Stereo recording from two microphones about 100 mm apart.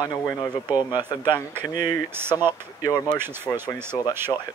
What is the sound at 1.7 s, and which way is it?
Speech, 45° left (ahead or behind).